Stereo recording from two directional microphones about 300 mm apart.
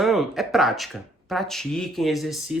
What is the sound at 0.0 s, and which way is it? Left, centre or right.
Speech, centre.